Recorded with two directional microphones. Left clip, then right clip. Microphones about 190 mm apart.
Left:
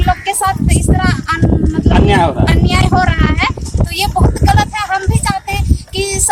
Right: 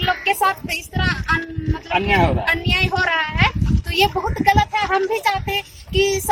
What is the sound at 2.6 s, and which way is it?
Speech, 20° left (ahead or behind).